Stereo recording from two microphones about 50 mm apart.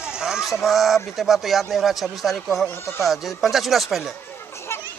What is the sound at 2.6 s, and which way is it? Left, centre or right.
Speech, left.